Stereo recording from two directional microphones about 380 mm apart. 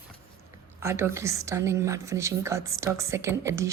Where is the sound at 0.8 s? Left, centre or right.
Centre.